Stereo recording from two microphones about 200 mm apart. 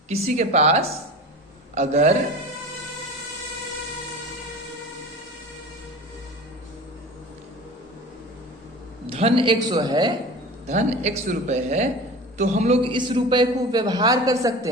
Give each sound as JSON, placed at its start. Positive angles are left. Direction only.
{"t": 0.1, "sound": "speech", "side_deg": -35}
{"t": 9.0, "sound": "a man's voice", "side_deg": -30}
{"t": 10.7, "sound": "a man's voice", "side_deg": -35}